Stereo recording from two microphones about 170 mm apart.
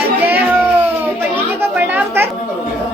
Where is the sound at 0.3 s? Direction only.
10° right (ahead or behind).